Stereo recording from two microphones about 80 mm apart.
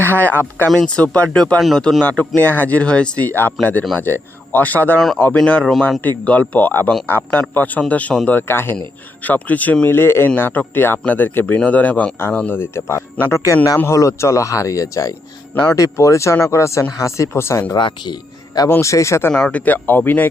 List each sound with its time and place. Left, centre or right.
0.2 s speech: left
0.7 s speech: centre
1.0 s speech: centre
1.6 s speech: centre; by 4.9 s left
4.9 s speech: centre
8.3 s speech: left
12.5 s speech: left
17.7 s speech: left
18.8 s speech: left
19.3 s speech: centre